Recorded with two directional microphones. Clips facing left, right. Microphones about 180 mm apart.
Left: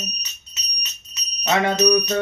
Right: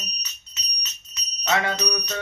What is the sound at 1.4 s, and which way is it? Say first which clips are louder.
Jingle bell: left 4 dB; 20° left (ahead or behind).